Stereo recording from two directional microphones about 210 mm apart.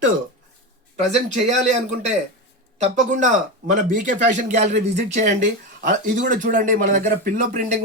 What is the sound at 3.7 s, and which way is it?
A man's voice, 35° right (ahead or behind).